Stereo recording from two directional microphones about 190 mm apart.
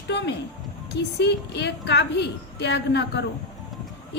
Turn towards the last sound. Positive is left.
turn(degrees=65)  # may be behind; listen again after turning